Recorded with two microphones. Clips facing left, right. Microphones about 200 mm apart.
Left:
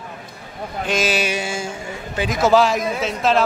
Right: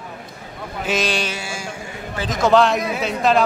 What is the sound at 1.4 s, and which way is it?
A man's voice, 20° left (ahead or behind).